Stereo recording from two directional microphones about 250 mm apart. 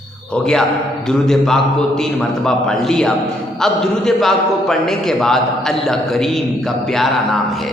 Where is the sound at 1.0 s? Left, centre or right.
Centre.